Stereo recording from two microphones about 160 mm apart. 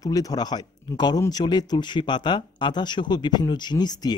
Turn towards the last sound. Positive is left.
turn(degrees=25)  # may be behind; listen again after turning